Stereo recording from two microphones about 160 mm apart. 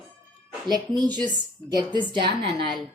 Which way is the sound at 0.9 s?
25° right (ahead or behind).